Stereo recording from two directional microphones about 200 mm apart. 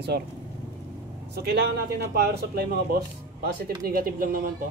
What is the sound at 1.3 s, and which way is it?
Speech, 50° right (ahead or behind).